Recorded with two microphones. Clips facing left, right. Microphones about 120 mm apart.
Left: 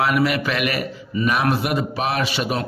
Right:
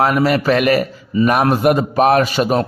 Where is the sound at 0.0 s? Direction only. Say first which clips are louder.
Right 5 dB; 40° right (ahead or behind).